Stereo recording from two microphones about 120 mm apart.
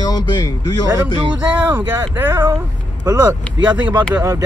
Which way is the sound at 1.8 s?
20° right (ahead or behind).